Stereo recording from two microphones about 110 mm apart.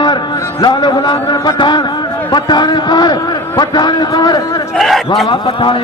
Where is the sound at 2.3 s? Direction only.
40° left (ahead or behind).